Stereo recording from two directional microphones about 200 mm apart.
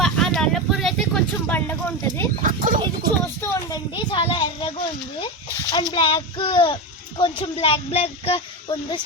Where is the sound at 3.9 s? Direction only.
25° left (ahead or behind).